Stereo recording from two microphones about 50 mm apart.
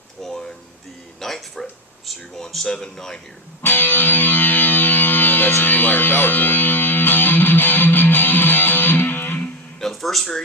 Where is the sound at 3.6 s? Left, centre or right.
Left.